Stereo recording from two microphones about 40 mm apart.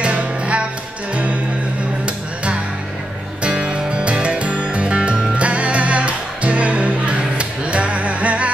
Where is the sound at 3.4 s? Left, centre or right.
Right.